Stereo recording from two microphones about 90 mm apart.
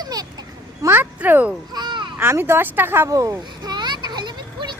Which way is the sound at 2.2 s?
25° right (ahead or behind).